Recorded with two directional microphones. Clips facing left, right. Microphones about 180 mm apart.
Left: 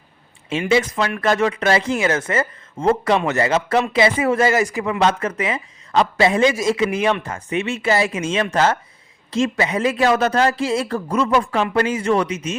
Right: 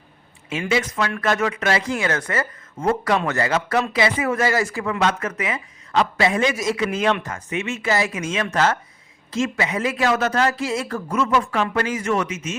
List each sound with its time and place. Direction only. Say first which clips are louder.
0.5 s speech: left 4 dB; 30° left (ahead or behind)
4.9 s speech: left 4 dB; 30° left (ahead or behind)
6.9 s speech: left 1 dB; 10° left (ahead or behind)
7.3 s speech: left 3 dB; 30° left (ahead or behind)